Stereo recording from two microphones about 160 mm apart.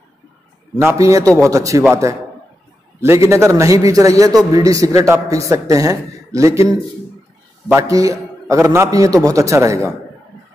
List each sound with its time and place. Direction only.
0.7 s a man's voice: 15° right (ahead or behind)
7.6 s a man's voice: 20° right (ahead or behind)